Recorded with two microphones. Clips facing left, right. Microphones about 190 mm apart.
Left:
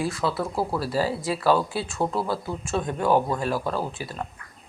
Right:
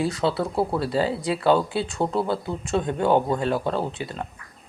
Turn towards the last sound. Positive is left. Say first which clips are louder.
# right 2 dB
turn(degrees=-25)  # may be behind; listen again after turning